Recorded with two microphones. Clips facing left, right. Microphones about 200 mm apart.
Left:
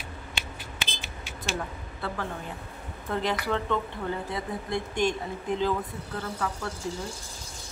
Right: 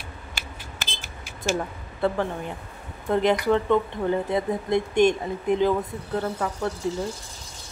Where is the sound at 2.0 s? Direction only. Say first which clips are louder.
Right 9 dB; 20° right (ahead or behind).